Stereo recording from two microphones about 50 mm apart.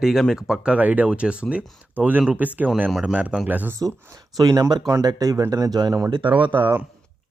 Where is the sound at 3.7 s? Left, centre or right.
Right.